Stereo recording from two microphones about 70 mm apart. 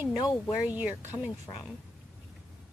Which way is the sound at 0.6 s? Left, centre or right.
Right.